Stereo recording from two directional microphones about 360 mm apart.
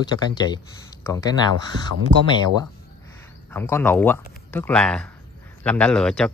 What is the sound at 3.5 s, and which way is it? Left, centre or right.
Speech, centre.